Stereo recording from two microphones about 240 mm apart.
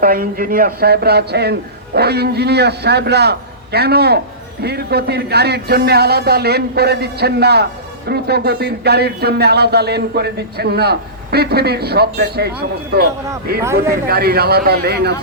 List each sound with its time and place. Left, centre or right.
0.0 s speech: right